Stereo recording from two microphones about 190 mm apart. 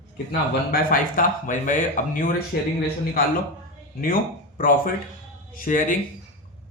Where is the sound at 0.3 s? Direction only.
50° left (ahead or behind).